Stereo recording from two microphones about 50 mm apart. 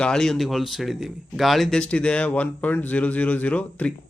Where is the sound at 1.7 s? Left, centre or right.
Centre.